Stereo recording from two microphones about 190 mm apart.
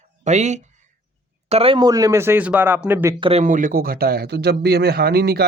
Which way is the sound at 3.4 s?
45° right (ahead or behind).